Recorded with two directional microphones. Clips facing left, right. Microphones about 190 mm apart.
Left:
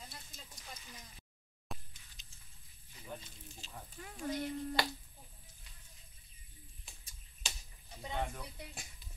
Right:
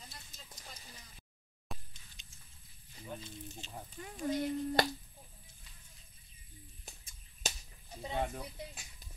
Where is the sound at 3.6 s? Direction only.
Centre (ahead or behind).